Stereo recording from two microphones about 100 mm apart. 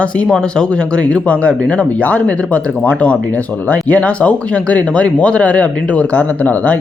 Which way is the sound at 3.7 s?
15° left (ahead or behind).